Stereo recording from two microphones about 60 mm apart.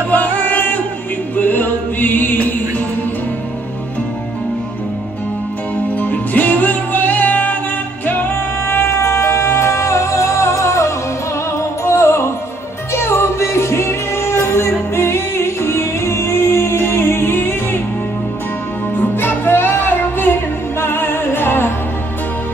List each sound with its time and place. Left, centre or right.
0.1 s music: left
5.9 s music: left
18.9 s music: left